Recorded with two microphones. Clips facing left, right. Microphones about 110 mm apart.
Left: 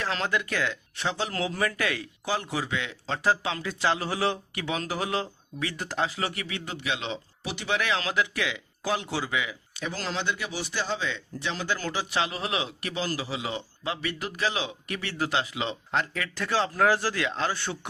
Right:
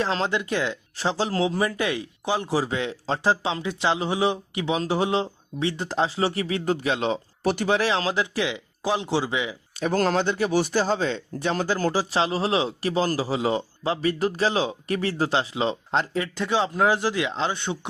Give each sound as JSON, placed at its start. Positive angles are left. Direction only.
{"t": 0.0, "sound": "speech", "side_deg": -25}
{"t": 7.8, "sound": "speech", "side_deg": -30}
{"t": 9.7, "sound": "speech", "side_deg": -50}